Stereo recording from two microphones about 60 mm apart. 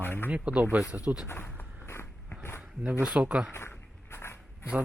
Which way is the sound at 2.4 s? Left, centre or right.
Left.